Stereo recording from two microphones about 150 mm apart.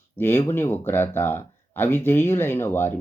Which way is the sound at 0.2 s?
15° left (ahead or behind).